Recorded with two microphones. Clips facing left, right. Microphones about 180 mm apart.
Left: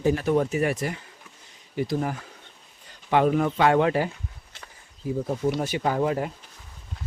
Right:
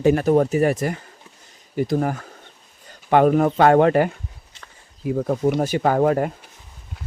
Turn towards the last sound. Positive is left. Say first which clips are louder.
# right 6 dB
turn(degrees=-50)  # may be behind; listen again after turning